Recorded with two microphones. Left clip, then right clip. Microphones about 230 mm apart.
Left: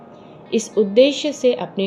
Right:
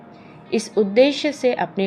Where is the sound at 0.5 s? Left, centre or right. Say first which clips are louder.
Left 2 dB; right.